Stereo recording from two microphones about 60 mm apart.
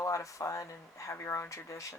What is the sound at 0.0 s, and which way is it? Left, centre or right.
Speech, left.